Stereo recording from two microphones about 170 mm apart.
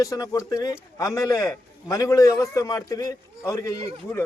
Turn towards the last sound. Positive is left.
turn(degrees=20)  # may be behind; listen again after turning